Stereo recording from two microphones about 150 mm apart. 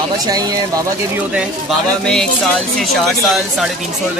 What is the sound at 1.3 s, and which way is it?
Speech, centre (ahead or behind).